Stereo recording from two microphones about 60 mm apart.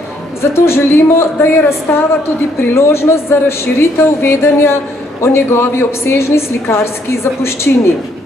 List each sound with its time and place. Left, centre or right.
0.4 s a woman's voice: left
1.9 s a woman's voice: left
2.7 s a woman's voice: left